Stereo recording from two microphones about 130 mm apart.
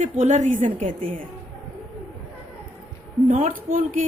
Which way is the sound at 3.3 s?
70° right (ahead or behind).